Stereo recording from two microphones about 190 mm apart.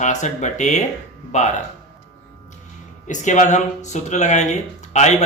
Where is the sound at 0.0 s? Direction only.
40° left (ahead or behind).